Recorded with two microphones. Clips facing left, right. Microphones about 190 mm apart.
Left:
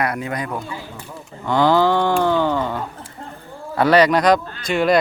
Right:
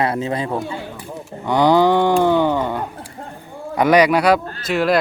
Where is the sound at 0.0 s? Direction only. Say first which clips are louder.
Right 3 dB; 25° right (ahead or behind).